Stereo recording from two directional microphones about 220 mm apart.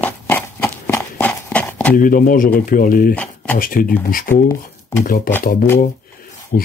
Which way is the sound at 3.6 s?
40° left (ahead or behind).